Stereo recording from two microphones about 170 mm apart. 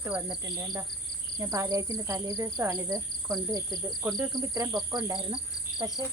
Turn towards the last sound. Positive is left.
turn(degrees=-20)  # may be behind; listen again after turning